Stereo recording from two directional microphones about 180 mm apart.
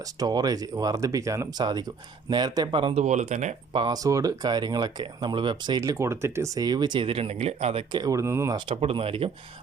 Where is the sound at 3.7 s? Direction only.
25° right (ahead or behind).